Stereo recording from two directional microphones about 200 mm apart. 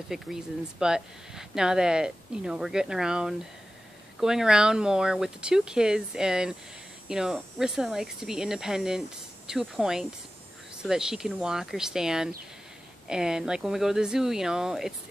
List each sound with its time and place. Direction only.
0.1 s speech: 5° right (ahead or behind)